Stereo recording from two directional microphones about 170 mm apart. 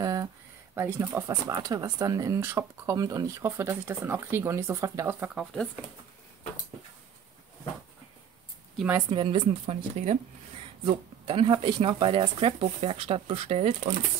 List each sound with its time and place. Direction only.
0.0 s a sound: 20° right (ahead or behind)
0.7 s speech: 15° right (ahead or behind); by 5.7 s centre (ahead or behind)
9.1 s speech: 30° right (ahead or behind)